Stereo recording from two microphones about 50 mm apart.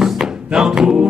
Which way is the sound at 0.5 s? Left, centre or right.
Centre.